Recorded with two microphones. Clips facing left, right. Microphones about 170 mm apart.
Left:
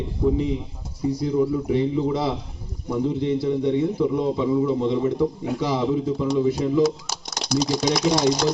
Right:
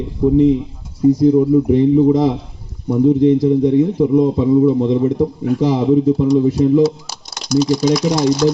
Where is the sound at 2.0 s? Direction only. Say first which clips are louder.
Right 11 dB; 45° right (ahead or behind).